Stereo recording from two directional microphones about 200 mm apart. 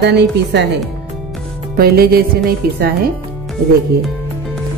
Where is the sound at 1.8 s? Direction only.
50° right (ahead or behind).